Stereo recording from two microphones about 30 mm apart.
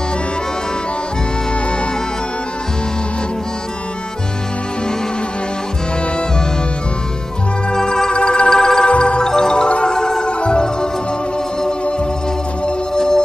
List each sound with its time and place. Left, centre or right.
7.7 s music: left
8.2 s music: left
8.5 s music: left
8.8 s music: left
9.2 s music: left
12.6 s music: left